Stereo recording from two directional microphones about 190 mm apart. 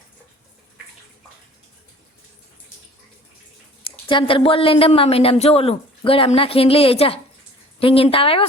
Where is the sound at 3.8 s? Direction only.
25° left (ahead or behind).